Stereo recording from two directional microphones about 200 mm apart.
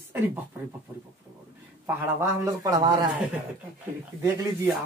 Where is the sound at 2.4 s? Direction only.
20° right (ahead or behind).